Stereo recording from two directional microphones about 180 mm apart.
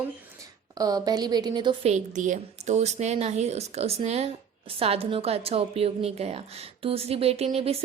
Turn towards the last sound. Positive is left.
turn(degrees=-30)  # may be behind; listen again after turning